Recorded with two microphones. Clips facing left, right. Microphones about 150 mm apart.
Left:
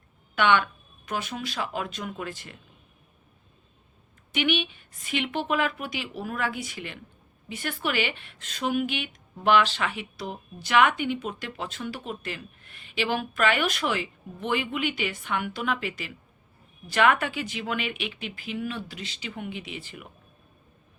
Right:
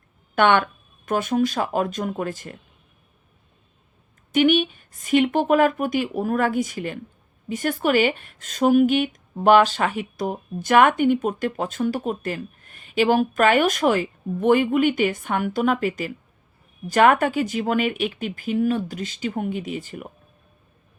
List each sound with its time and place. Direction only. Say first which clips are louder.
0.3 s speech: right 5 dB; 50° right (ahead or behind)
4.3 s speech: right 9 dB; 45° right (ahead or behind)